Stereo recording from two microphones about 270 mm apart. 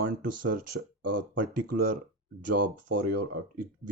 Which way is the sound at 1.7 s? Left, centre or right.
Right.